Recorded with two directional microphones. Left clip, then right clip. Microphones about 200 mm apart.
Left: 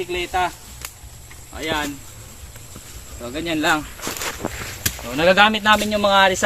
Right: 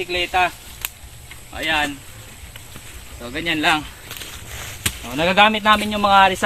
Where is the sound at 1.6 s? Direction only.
15° right (ahead or behind).